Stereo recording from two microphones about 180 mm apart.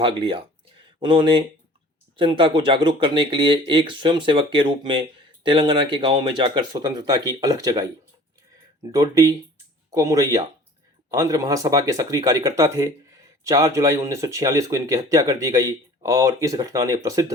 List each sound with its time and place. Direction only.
0.0 s speech: 30° right (ahead or behind)
8.9 s speech: 20° right (ahead or behind)